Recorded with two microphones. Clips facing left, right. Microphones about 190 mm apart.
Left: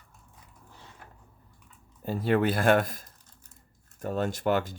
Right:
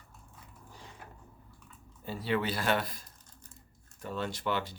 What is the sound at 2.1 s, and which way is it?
Speech, 50° left (ahead or behind).